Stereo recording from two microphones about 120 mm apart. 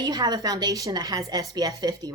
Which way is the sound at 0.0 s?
35° right (ahead or behind).